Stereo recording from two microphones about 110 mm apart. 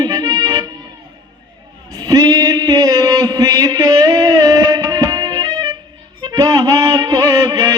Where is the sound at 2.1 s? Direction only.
35° right (ahead or behind).